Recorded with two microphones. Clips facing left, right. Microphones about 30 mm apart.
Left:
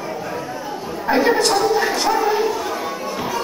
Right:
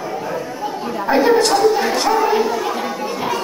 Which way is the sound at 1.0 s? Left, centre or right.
Centre.